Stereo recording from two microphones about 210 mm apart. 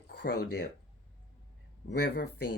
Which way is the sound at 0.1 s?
45° left (ahead or behind).